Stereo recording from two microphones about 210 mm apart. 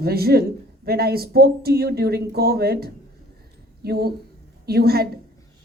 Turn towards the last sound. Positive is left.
turn(degrees=-50)  # may be behind; listen again after turning